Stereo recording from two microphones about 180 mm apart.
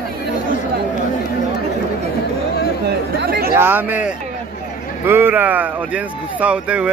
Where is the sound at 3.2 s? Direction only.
60° right (ahead or behind).